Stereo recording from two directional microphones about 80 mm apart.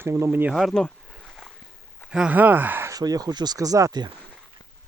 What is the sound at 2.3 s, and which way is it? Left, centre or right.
Speech, right.